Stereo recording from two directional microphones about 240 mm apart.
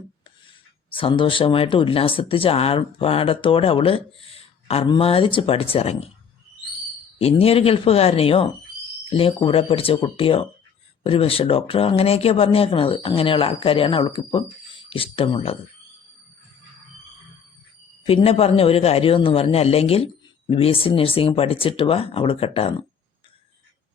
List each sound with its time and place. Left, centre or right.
0.9 s speech: left
7.2 s speech: left
18.0 s speech: left